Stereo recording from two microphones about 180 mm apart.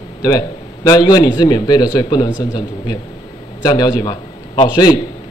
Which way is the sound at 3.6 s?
20° left (ahead or behind).